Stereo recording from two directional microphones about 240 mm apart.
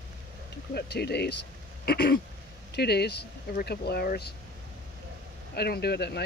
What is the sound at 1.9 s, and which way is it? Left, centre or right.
Throat clearing, left.